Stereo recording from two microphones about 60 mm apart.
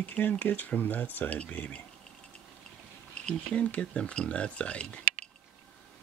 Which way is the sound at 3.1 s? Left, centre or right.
Centre.